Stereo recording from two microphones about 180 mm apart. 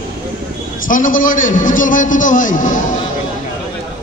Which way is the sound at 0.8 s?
50° left (ahead or behind).